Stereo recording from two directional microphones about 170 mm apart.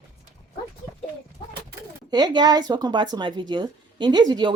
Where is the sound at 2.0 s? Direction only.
25° right (ahead or behind).